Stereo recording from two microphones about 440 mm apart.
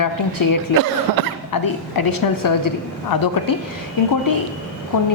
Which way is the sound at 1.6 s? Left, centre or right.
Left.